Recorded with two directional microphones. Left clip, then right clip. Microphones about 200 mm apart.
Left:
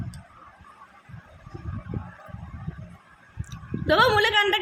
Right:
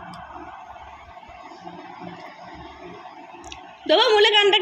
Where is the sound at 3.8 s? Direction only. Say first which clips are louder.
Right 3 dB; 35° left (ahead or behind).